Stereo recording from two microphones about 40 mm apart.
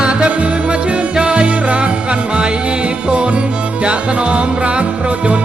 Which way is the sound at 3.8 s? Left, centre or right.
Right.